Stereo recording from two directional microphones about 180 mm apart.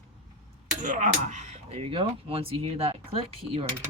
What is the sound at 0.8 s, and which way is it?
Speech, 45° right (ahead or behind).